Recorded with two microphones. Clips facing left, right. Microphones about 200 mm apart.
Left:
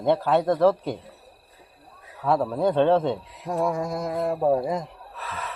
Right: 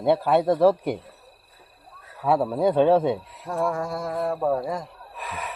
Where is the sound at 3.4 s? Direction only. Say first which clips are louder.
Left 1 dB; 20° left (ahead or behind).